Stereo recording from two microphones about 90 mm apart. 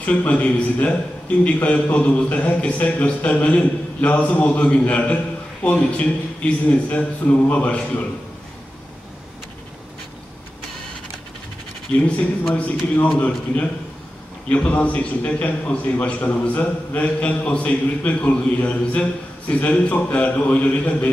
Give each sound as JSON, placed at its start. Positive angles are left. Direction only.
{"t": 0.0, "sound": "a man's voice", "side_deg": 15}
{"t": 12.5, "sound": "a man's voice", "side_deg": 20}
{"t": 14.5, "sound": "a man's voice", "side_deg": 15}